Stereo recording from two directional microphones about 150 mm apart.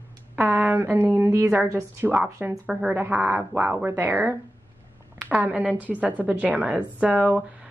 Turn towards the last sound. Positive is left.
turn(degrees=-10)  # may be behind; listen again after turning